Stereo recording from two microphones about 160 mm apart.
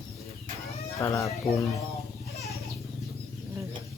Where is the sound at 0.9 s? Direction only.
20° left (ahead or behind).